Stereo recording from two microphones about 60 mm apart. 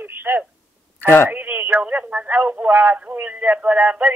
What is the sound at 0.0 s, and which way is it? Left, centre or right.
Telephone, right.